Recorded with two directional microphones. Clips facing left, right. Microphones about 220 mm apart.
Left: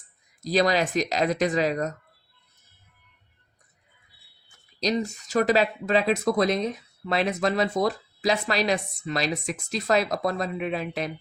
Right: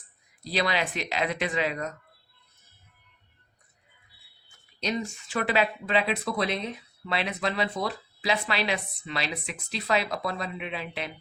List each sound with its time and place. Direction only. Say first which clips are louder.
0.4 s speech: left 6 dB; 40° left (ahead or behind)
4.8 s speech: left 5 dB; 35° left (ahead or behind)